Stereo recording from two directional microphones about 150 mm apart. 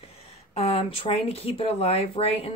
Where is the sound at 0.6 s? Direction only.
40° left (ahead or behind).